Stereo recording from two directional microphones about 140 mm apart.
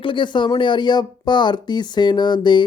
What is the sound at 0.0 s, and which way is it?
Speech, 35° left (ahead or behind).